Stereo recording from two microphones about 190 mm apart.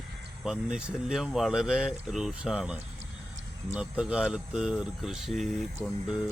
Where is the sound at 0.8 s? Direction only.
5° right (ahead or behind).